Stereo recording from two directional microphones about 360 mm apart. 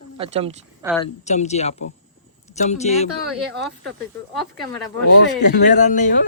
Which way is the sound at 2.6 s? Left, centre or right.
Centre.